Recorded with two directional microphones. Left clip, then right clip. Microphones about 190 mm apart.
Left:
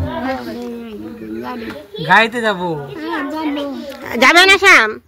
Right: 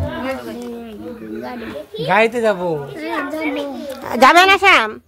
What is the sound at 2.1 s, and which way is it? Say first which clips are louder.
Speech: left 2 dB; 30° right (ahead or behind).